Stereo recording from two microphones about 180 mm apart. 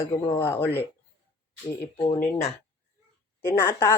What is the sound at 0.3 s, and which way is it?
Speech, 15° left (ahead or behind).